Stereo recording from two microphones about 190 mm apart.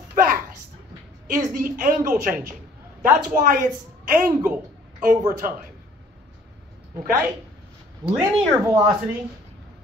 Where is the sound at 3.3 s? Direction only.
45° right (ahead or behind).